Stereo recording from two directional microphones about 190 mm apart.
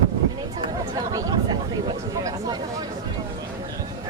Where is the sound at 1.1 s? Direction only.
20° right (ahead or behind).